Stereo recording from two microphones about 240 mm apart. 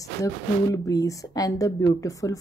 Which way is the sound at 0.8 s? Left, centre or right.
Centre.